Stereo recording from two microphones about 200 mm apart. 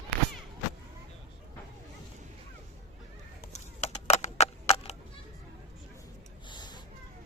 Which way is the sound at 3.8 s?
35° left (ahead or behind).